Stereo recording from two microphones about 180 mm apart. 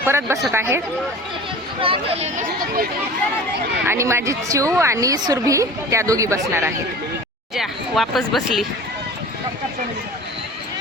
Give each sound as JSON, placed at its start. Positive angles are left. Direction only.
{"t": 0.1, "sound": "a woman's voice", "side_deg": -15}
{"t": 1.8, "sound": "speech", "side_deg": -30}
{"t": 3.8, "sound": "a woman's voice", "side_deg": -15}
{"t": 7.5, "sound": "speech", "side_deg": 0}